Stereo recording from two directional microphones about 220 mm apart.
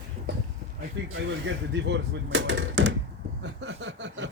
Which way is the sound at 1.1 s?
60° right (ahead or behind).